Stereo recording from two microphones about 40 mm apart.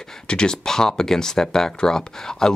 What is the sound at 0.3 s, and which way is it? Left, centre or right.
Speech, left.